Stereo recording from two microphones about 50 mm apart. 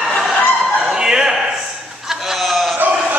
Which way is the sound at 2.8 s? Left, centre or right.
Right.